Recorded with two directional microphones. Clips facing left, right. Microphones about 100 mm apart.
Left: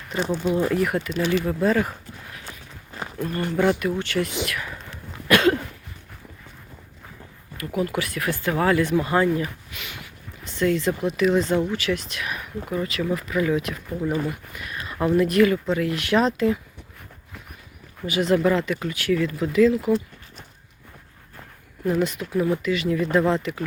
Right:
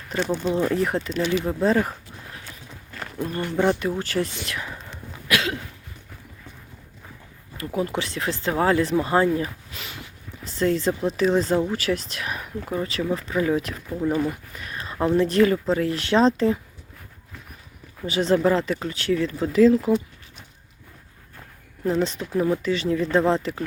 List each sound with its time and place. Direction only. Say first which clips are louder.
0.2 s speech: even; 5° left (ahead or behind)
0.8 s speech: even; 30° right (ahead or behind)
1.3 s speech: even; 20° right (ahead or behind)
3.2 s speech: left 1 dB; 25° right (ahead or behind)
4.4 s whispering: left 1 dB; 25° right (ahead or behind)
5.3 s cough: left 7 dB; 50° left (ahead or behind)
7.5 s speech: even; 30° right (ahead or behind)
14.5 s a sound: even; 35° right (ahead or behind)
15.1 s speech: left 1 dB; 30° right (ahead or behind)
18.0 s speech: even; 30° right (ahead or behind)
21.8 s speech: even; 30° right (ahead or behind)